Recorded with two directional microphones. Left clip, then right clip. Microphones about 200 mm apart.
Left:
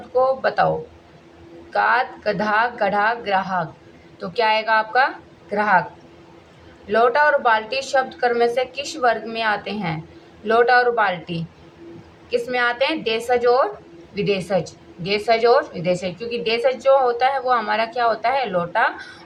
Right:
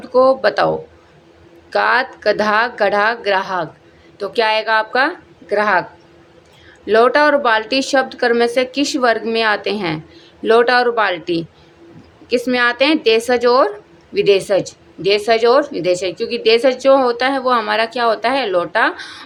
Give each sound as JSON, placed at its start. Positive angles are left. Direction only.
{"t": 0.1, "sound": "speech", "side_deg": -60}
{"t": 1.7, "sound": "speech", "side_deg": -60}
{"t": 6.8, "sound": "speech", "side_deg": -60}